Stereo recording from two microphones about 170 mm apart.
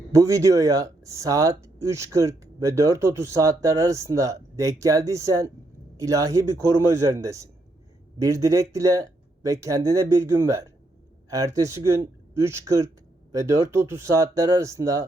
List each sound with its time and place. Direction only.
0.1 s speech: 20° right (ahead or behind)